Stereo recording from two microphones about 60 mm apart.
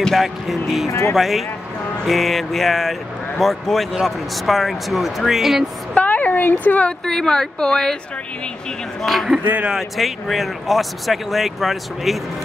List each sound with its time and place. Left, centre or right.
0.0 s speech: centre
5.9 s a sound: left
7.1 s a woman's voice: centre
9.0 s speech: centre
9.4 s speech: right
9.7 s speech: centre